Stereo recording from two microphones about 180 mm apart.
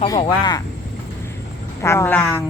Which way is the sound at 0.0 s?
25° left (ahead or behind).